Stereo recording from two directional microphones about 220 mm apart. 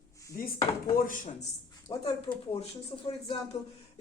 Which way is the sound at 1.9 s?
25° left (ahead or behind).